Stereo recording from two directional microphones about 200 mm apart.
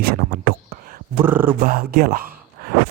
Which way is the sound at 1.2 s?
10° right (ahead or behind).